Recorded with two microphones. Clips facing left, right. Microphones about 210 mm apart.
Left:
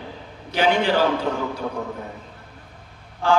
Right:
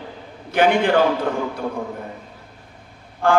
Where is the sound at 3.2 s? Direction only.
55° right (ahead or behind).